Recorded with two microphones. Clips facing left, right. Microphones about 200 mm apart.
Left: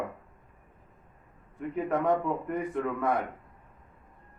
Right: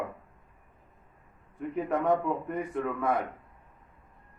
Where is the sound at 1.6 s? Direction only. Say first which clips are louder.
Even; centre (ahead or behind).